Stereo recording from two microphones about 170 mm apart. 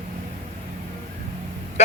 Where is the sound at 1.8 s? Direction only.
40° left (ahead or behind).